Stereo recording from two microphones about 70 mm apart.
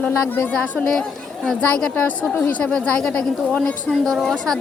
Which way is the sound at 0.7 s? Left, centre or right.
Centre.